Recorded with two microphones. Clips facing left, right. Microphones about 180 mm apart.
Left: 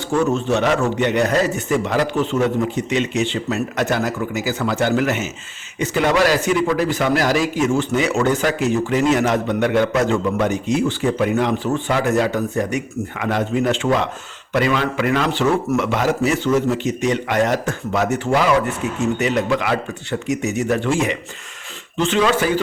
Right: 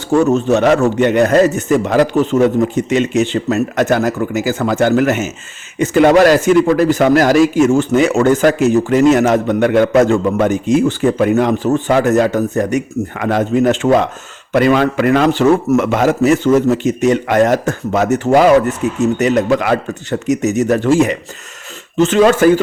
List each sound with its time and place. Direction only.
0.1 s a man's voice: 45° right (ahead or behind)